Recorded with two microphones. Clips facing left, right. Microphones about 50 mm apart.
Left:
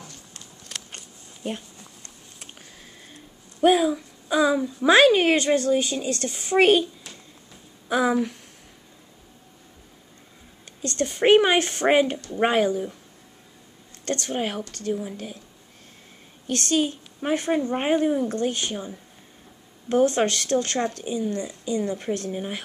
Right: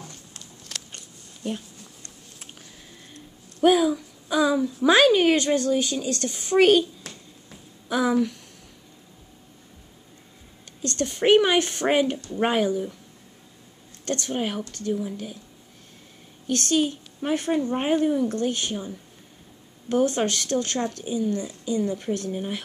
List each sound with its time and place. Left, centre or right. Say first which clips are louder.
0.0 s a sound: right 1 dB; centre
1.4 s a woman's voice: even; centre
3.6 s speech: even; centre
4.9 s a woman's voice: left 2 dB; centre
6.3 s a woman's voice: right 1 dB; centre
7.9 s speech: even; left
10.8 s a woman's voice: left 2 dB; centre
12.5 s speech: left 1 dB; left
14.0 s speech: even; left
14.3 s a woman's voice: even; centre
16.4 s speech: even; left
17.5 s a woman's voice: left 1 dB; centre
18.3 s speech: even; left
19.9 s speech: left 2 dB; left